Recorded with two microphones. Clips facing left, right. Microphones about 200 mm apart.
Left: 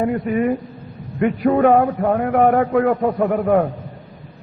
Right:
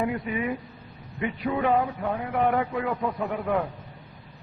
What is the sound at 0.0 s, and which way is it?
A man's voice, 45° left (ahead or behind).